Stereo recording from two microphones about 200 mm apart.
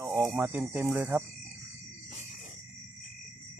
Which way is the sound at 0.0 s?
15° right (ahead or behind).